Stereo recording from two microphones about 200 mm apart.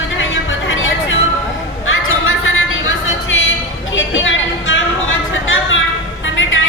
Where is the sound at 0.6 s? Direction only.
75° left (ahead or behind).